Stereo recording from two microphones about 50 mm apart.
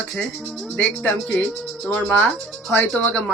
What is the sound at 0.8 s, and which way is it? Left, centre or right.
Speech, left.